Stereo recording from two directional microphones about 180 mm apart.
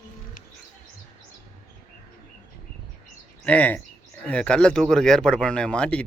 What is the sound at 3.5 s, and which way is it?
Speech, 10° left (ahead or behind).